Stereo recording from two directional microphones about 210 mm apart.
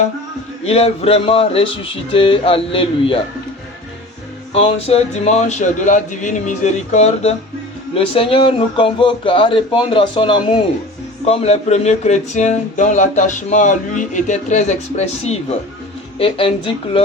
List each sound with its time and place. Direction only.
0.6 s speech: 30° left (ahead or behind)
4.5 s speech: 30° left (ahead or behind)